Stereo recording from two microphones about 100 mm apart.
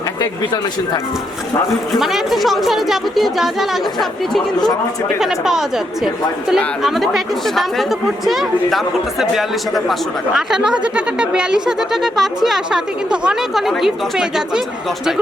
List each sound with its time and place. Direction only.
2.0 s speech: 5° right (ahead or behind)
5.2 s speech: 5° right (ahead or behind)